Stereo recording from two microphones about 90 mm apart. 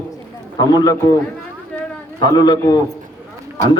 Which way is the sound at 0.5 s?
45° left (ahead or behind).